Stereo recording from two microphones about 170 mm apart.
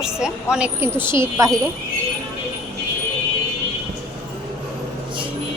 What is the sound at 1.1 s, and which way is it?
Speech, 15° right (ahead or behind).